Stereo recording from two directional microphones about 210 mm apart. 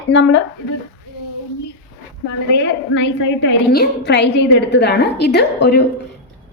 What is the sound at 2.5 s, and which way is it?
A woman's voice, 55° left (ahead or behind).